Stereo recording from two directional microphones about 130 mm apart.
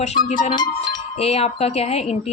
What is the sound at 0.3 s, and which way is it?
Music, 60° left (ahead or behind).